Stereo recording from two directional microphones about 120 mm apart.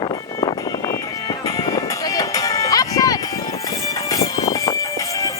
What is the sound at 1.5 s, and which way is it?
Music, 30° left (ahead or behind).